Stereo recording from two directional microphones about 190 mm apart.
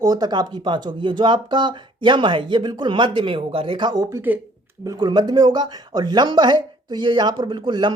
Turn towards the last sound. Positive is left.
turn(degrees=-25)  # may be behind; listen again after turning